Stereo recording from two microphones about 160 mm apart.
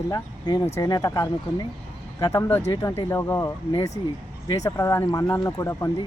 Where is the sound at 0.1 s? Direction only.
25° left (ahead or behind).